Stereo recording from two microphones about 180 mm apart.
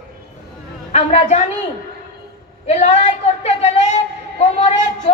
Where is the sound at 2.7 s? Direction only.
35° left (ahead or behind).